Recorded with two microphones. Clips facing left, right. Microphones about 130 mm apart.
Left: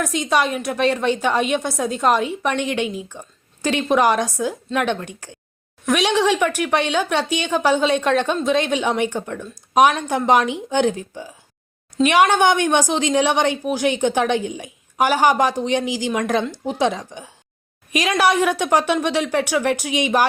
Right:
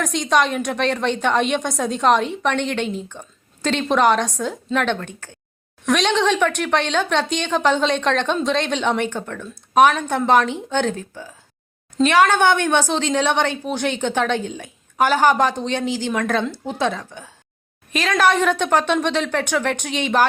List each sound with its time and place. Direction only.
0.0 s a woman's voice: 5° left (ahead or behind)